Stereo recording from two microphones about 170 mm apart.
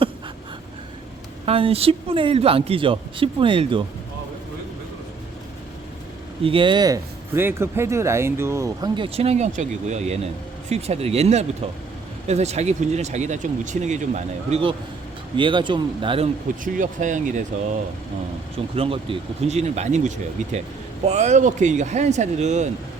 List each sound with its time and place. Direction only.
1.5 s a man's voice: 35° right (ahead or behind)
6.4 s speech: 30° right (ahead or behind)
9.0 s a man's voice: 35° right (ahead or behind)
15.4 s speech: 30° right (ahead or behind)
16.6 s speech: 50° right (ahead or behind)
18.7 s a man's voice: 35° right (ahead or behind)